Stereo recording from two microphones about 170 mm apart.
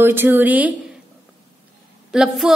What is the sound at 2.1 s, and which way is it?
Speech, 5° right (ahead or behind).